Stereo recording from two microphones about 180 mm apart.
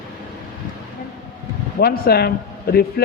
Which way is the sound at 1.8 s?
60° left (ahead or behind).